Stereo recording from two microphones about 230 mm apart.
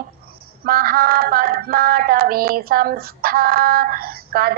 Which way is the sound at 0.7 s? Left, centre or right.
Right.